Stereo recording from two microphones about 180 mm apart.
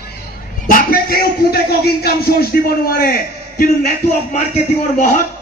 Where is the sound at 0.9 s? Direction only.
55° left (ahead or behind).